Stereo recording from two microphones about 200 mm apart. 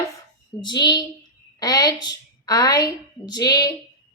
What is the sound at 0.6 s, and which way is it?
A woman's voice, 20° left (ahead or behind).